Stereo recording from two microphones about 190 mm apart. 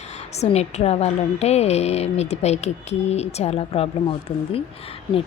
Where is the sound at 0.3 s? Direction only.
35° left (ahead or behind).